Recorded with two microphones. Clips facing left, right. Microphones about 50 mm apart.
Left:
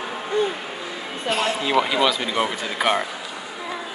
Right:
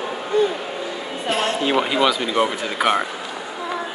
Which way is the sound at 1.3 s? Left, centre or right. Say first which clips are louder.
Right 2 dB; right.